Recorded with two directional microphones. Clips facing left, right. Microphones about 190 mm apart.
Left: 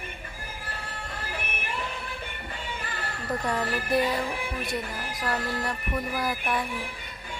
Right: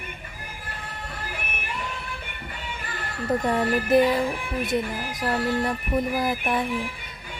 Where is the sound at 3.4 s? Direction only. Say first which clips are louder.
Right 5 dB; 25° right (ahead or behind).